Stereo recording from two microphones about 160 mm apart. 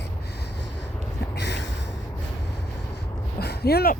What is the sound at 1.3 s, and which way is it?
Snort, 90° left.